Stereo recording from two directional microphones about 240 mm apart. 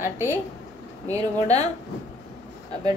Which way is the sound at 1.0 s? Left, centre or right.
Centre.